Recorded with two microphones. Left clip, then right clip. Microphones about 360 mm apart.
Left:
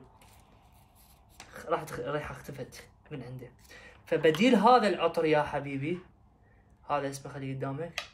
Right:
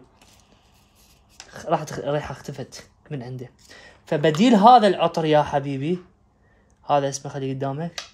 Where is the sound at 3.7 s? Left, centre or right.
Right.